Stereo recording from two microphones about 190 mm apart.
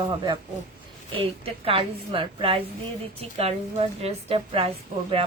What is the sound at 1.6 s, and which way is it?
A woman's voice, 30° right (ahead or behind).